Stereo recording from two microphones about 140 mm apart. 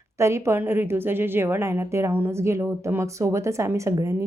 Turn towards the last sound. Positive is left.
turn(degrees=-20)  # may be behind; listen again after turning